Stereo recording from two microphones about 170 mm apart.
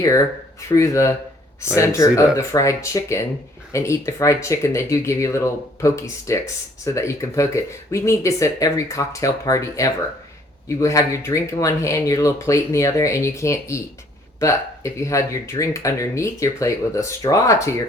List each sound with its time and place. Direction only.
0.7 s speech: 20° left (ahead or behind)